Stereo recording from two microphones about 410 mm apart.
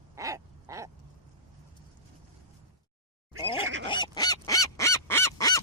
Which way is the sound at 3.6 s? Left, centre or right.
Right.